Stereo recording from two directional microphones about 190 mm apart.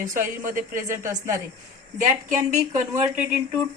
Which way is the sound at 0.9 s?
15° right (ahead or behind).